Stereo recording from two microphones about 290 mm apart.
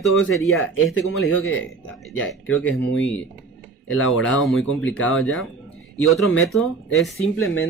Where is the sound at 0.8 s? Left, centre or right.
Left.